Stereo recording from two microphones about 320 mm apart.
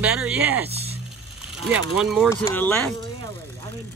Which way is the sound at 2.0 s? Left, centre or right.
Centre.